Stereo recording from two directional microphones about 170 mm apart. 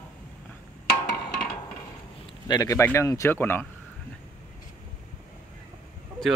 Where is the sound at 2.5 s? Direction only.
20° left (ahead or behind).